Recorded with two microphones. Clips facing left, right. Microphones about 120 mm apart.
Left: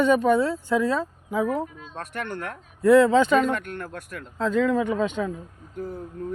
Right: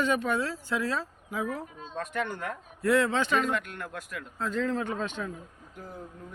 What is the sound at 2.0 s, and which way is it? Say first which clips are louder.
Speech: even; 70° left (ahead or behind).